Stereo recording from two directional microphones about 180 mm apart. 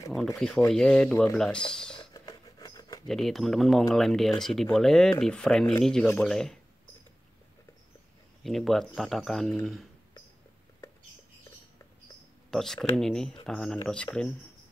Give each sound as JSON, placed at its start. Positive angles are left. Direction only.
{"t": 0.1, "sound": "speech", "side_deg": 0}
{"t": 2.0, "sound": "mouse", "side_deg": 20}
{"t": 3.1, "sound": "speech", "side_deg": 0}
{"t": 8.5, "sound": "speech", "side_deg": 0}
{"t": 12.4, "sound": "speech", "side_deg": 0}